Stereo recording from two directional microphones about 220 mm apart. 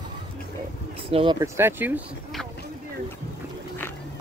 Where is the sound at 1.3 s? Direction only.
10° right (ahead or behind).